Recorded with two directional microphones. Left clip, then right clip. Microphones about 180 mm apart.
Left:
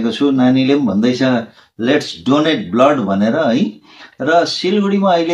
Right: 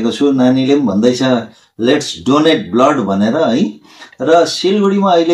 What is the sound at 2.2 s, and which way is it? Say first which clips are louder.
Speech: right 5 dB; 15° left (ahead or behind).